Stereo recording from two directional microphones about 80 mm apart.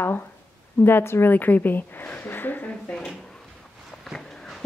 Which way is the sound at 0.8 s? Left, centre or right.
Left.